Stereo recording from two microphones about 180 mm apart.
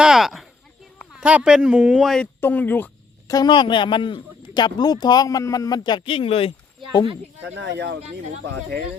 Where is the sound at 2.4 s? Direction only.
10° left (ahead or behind).